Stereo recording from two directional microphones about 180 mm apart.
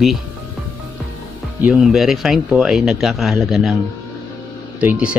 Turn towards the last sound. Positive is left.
turn(degrees=-5)  # may be behind; listen again after turning